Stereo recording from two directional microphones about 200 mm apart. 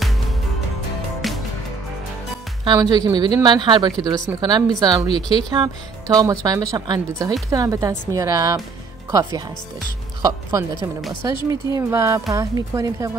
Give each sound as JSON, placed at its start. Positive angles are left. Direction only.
{"t": 1.2, "sound": "music", "side_deg": 0}
{"t": 2.6, "sound": "speech", "side_deg": -20}
{"t": 10.2, "sound": "speech", "side_deg": -20}